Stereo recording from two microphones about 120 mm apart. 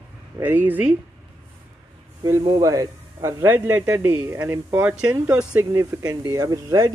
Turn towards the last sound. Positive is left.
turn(degrees=-25)  # may be behind; listen again after turning